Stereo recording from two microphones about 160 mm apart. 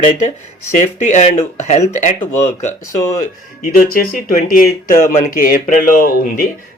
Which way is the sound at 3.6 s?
60° left (ahead or behind).